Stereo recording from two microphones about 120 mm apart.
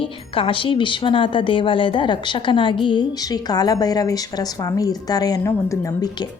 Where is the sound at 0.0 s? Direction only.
45° left (ahead or behind).